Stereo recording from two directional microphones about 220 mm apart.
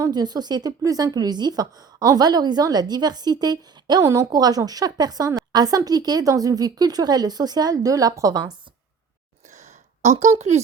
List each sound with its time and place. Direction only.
0.0 s a woman's voice: 20° right (ahead or behind)
10.0 s a woman's voice: 30° right (ahead or behind)